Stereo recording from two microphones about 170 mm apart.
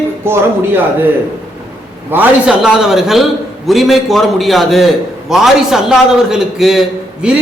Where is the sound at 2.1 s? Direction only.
10° right (ahead or behind).